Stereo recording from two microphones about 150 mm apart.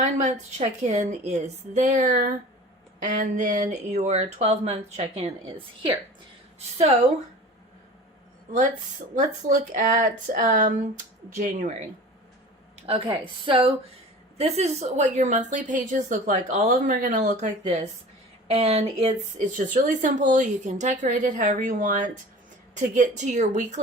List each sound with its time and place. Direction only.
0.0 s speech: 50° right (ahead or behind)
6.6 s speech: 45° right (ahead or behind)
9.1 s a woman's voice: 60° right (ahead or behind)
12.8 s a woman's voice: 40° right (ahead or behind)
14.3 s a woman's voice: 45° right (ahead or behind)
18.4 s speech: 40° right (ahead or behind)
19.5 s a woman's voice: 60° right (ahead or behind)